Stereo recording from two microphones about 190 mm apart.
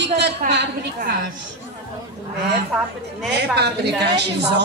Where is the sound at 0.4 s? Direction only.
55° right (ahead or behind).